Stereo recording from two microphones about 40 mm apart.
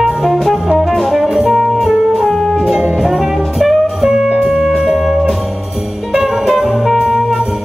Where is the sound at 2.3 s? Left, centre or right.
Centre.